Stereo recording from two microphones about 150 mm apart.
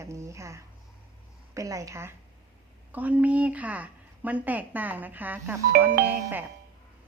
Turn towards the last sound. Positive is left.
turn(degrees=-10)  # may be behind; listen again after turning